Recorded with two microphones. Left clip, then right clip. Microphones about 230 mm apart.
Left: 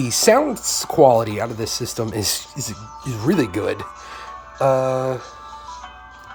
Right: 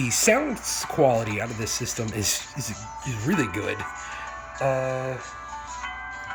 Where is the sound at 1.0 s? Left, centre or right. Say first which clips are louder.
Left 8 dB; centre.